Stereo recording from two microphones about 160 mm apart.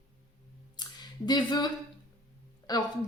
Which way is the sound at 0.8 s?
25° left (ahead or behind).